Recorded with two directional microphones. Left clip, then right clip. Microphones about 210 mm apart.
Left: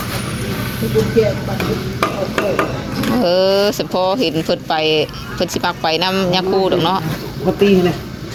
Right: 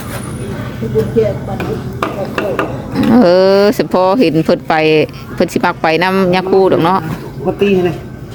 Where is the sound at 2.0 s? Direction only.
5° left (ahead or behind).